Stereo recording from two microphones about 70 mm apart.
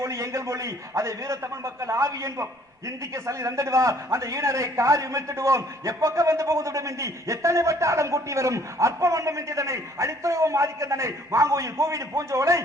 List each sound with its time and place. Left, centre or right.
0.0 s a man's voice: right